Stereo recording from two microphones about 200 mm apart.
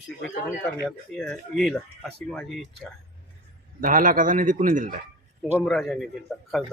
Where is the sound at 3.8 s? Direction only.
40° right (ahead or behind).